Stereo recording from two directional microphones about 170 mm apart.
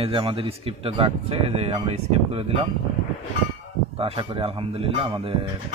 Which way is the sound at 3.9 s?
35° right (ahead or behind).